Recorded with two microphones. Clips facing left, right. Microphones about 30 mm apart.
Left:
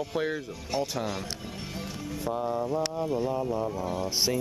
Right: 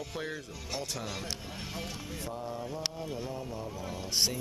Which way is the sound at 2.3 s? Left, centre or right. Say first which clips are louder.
Left 11 dB; left.